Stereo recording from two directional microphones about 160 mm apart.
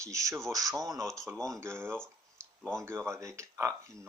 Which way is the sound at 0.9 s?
Centre (ahead or behind).